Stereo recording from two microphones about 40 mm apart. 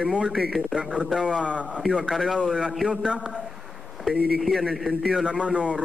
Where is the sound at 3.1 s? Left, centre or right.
Right.